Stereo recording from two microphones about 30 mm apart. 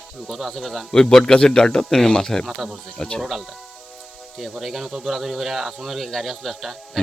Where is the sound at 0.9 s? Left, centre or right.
Centre.